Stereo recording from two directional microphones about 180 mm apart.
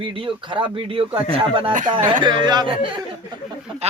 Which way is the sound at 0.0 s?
30° right (ahead or behind).